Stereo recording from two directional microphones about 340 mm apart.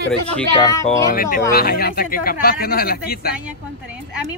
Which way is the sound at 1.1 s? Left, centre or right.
Left.